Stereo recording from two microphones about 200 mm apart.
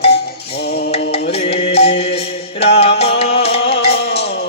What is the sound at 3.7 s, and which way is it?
Music, 55° left (ahead or behind).